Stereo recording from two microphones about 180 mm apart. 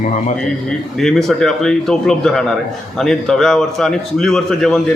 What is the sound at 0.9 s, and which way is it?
A man's voice, centre (ahead or behind).